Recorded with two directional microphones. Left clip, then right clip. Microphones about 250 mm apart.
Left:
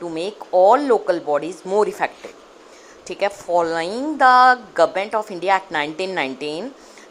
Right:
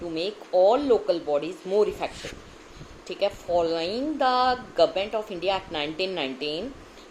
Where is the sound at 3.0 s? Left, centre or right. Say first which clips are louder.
Left 4 dB; left.